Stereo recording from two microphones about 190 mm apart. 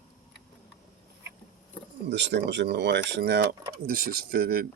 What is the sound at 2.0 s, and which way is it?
Speech, 65° right (ahead or behind).